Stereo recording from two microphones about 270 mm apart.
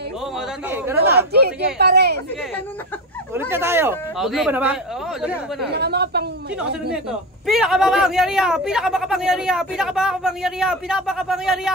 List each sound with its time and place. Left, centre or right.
0.9 s speech: right
3.3 s speech: centre
5.6 s speech: right
6.9 s a man's voice: centre